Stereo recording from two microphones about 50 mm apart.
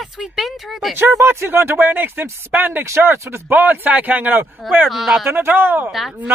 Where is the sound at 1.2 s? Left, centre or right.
Right.